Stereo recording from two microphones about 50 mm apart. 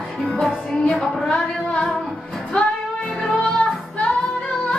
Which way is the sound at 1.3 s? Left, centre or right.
Left.